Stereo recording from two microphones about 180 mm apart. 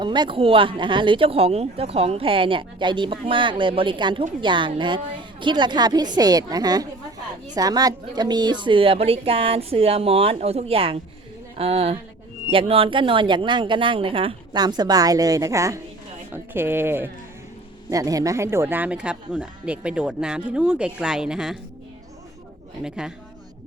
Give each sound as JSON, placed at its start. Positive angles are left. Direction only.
{"t": 0.0, "sound": "a woman's voice", "side_deg": -25}
{"t": 22.8, "sound": "speech", "side_deg": -5}